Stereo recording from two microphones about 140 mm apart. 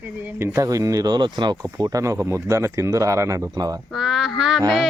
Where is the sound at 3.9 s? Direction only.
Centre (ahead or behind).